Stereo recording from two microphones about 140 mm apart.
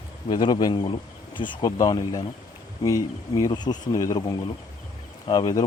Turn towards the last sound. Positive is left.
turn(degrees=30)  # may be behind; listen again after turning